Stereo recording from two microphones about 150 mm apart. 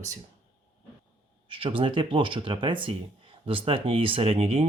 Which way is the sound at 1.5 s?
35° right (ahead or behind).